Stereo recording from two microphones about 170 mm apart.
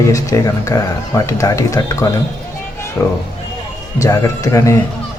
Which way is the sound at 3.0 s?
20° left (ahead or behind).